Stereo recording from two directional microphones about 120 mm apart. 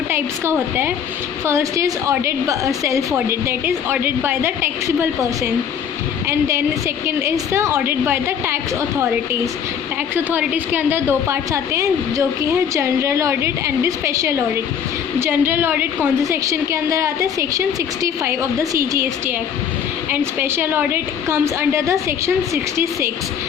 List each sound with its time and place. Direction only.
0.1 s a woman's voice: 20° right (ahead or behind)
10.2 s a woman's voice: 15° right (ahead or behind)
16.2 s a woman's voice: 25° right (ahead or behind)